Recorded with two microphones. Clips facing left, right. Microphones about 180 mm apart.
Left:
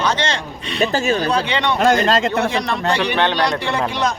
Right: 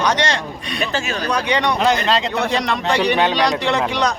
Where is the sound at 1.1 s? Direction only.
30° left (ahead or behind).